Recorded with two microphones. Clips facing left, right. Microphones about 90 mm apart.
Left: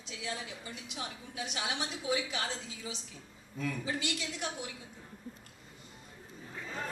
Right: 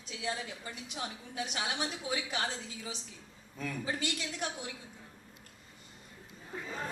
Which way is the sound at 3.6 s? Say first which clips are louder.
Left 1 dB; 45° right (ahead or behind).